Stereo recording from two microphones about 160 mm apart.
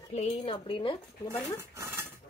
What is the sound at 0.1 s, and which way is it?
Speech, 40° left (ahead or behind).